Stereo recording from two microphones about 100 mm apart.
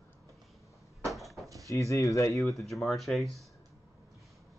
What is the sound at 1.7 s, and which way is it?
Speech, 30° left (ahead or behind).